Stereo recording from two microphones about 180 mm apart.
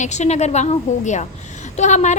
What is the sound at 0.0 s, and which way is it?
A woman's voice, 40° left (ahead or behind).